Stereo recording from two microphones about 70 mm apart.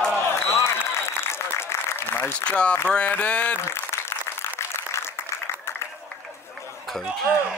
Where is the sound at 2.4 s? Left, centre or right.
Centre.